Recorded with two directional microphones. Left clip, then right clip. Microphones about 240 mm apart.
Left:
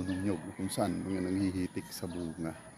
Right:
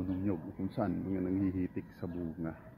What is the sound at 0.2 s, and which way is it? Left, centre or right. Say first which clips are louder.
Speech: left 1 dB; centre.